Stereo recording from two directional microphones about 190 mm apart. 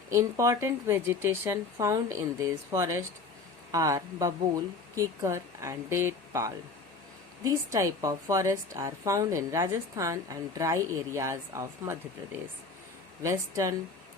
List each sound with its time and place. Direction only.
0.1 s a woman's voice: 15° right (ahead or behind)
13.2 s a woman's voice: 20° right (ahead or behind)